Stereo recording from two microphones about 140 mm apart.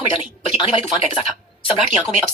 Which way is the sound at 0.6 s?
40° left (ahead or behind).